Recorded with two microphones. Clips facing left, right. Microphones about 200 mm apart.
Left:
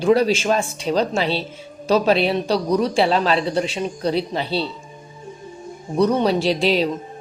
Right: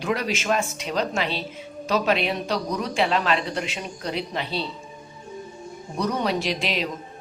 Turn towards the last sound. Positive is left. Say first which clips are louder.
# left 8 dB
turn(degrees=30)  # may be behind; listen again after turning